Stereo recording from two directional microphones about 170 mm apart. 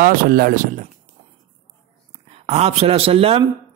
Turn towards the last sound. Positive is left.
turn(degrees=-35)  # may be behind; listen again after turning